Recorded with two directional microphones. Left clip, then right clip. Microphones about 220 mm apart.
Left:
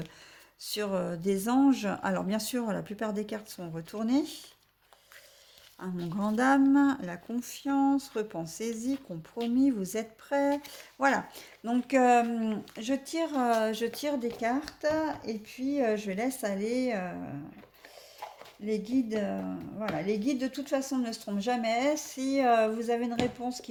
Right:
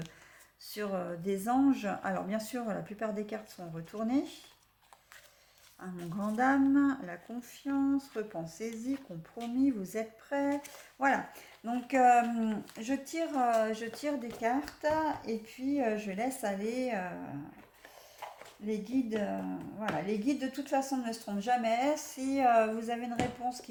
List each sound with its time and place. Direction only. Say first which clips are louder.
0.6 s speech: left 5 dB; 45° left (ahead or behind)
5.8 s speech: left 5 dB; 45° left (ahead or behind)
18.6 s speech: left 4 dB; 40° left (ahead or behind)